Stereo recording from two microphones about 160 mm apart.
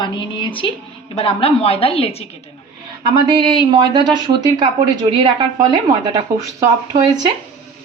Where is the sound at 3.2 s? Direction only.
30° right (ahead or behind).